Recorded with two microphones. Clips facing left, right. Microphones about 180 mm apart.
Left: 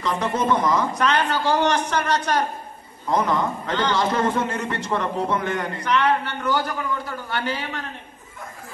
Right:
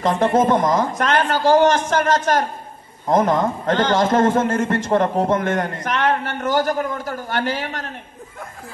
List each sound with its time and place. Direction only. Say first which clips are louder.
0.0 s a man's voice: right 7 dB; 50° right (ahead or behind)